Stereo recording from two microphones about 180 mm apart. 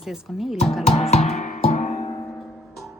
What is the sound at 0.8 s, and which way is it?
Music, 35° left (ahead or behind).